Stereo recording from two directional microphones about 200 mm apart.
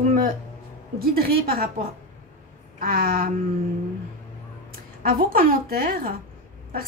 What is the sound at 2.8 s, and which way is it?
Speech, 45° right (ahead or behind).